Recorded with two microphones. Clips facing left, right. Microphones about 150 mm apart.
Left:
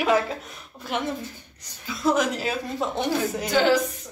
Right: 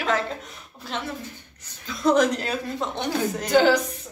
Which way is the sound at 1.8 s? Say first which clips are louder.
Right 3 dB; centre (ahead or behind).